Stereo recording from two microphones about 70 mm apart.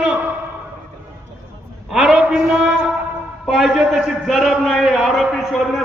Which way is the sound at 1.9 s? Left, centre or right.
Centre.